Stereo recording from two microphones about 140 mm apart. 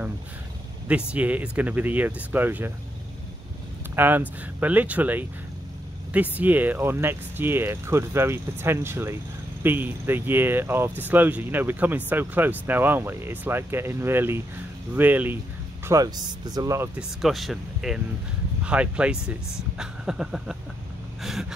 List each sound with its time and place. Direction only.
0.8 s speech: 10° right (ahead or behind)
3.9 s speech: 15° right (ahead or behind)
15.9 s speech: 25° right (ahead or behind)
16.9 s speech: centre (ahead or behind)
21.2 s a sound: centre (ahead or behind)